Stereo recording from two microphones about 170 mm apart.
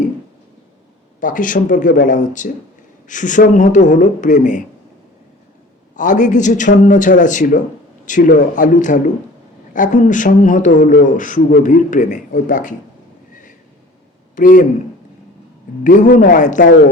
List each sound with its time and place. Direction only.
1.2 s a man's voice: 50° left (ahead or behind)
6.0 s a man's voice: 50° left (ahead or behind)
14.3 s a man's voice: 50° left (ahead or behind)
15.8 s a man's voice: 50° left (ahead or behind)